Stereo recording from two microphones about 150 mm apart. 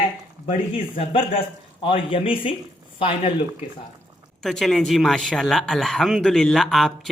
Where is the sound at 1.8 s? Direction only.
40° left (ahead or behind).